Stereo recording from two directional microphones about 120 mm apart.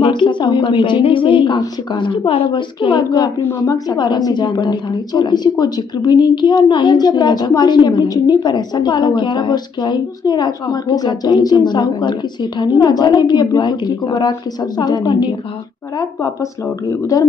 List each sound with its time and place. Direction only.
0.0 s a woman's voice: 40° left (ahead or behind)
16.0 s speech: 25° left (ahead or behind)